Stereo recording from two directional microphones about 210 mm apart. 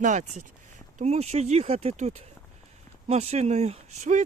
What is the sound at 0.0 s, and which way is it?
Speech, 35° right (ahead or behind).